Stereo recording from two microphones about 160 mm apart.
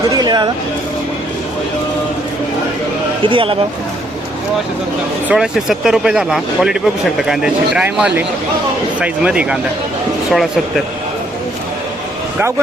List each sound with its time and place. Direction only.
0.1 s a sound: 25° right (ahead or behind)
3.2 s speech: 35° right (ahead or behind)
5.3 s speech: 5° right (ahead or behind)